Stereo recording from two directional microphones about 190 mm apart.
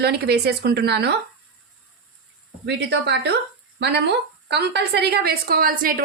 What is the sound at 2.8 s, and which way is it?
A woman's voice, 65° right (ahead or behind).